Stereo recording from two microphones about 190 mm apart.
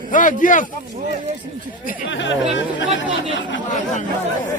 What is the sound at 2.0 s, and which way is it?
Speech, 70° left (ahead or behind).